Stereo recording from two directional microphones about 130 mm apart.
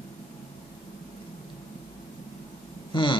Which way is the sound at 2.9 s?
40° left (ahead or behind).